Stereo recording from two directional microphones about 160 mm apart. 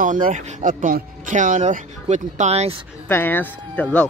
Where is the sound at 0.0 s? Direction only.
55° right (ahead or behind).